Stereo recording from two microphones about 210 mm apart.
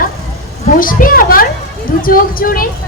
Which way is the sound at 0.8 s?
40° left (ahead or behind).